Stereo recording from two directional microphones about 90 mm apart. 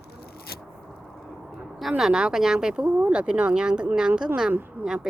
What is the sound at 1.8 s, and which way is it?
A woman's voice, 5° right (ahead or behind).